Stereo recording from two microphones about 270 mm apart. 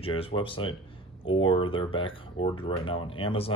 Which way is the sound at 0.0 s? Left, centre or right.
Centre.